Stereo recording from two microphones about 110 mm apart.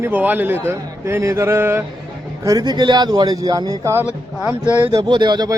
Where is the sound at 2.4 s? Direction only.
35° right (ahead or behind).